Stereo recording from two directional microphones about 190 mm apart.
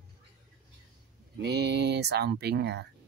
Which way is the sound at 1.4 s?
60° right (ahead or behind).